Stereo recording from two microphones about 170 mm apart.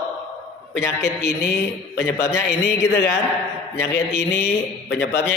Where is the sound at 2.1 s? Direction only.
15° left (ahead or behind).